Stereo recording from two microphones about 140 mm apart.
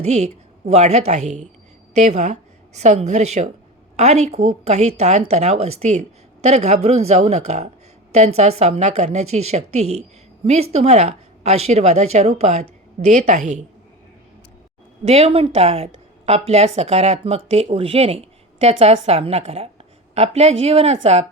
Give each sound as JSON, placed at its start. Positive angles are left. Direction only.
{"t": 0.0, "sound": "a woman's voice", "side_deg": -50}
{"t": 15.0, "sound": "a woman's voice", "side_deg": -45}